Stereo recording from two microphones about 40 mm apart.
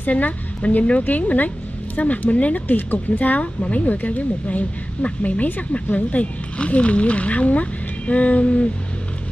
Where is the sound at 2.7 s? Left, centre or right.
Left.